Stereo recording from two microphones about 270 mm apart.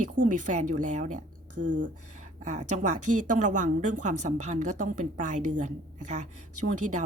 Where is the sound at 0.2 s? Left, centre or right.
Right.